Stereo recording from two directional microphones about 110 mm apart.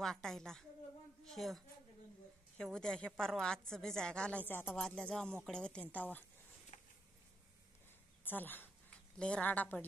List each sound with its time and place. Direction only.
0.0 s a woman's voice: 5° left (ahead or behind)
6.7 s a sound: 90° left
8.2 s a woman's voice: 15° left (ahead or behind)